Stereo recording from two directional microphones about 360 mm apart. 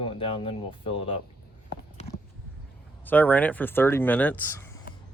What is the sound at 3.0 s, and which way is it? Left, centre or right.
Speech, centre.